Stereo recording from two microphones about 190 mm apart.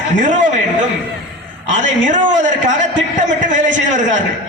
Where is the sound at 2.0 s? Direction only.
40° right (ahead or behind).